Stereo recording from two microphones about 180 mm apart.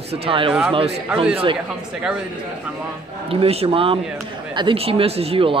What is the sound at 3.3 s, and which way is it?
A man's voice, 35° right (ahead or behind).